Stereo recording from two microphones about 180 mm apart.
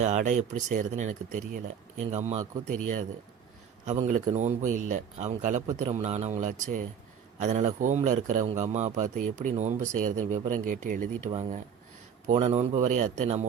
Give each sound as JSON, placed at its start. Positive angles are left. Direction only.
{"t": 0.0, "sound": "speech", "side_deg": -40}
{"t": 3.8, "sound": "a man's voice", "side_deg": -40}